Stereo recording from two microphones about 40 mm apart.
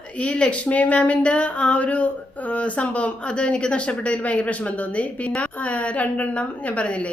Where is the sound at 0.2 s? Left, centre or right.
Left.